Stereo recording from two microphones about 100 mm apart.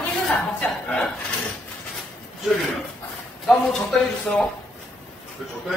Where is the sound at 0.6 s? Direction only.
10° left (ahead or behind).